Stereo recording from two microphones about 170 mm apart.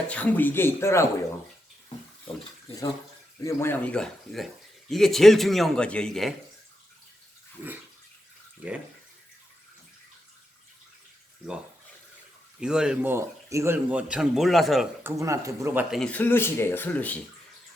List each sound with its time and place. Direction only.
0.1 s speech: 10° left (ahead or behind)
3.4 s speech: 15° left (ahead or behind)
7.6 s speech: 10° right (ahead or behind)
12.5 s speech: 5° right (ahead or behind)
15.0 s speech: 15° right (ahead or behind)
16.0 s speech: 10° left (ahead or behind)